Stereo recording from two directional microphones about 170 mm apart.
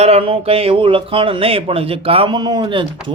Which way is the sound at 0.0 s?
35° right (ahead or behind).